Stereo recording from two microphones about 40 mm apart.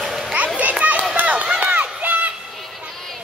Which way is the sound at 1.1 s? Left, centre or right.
Right.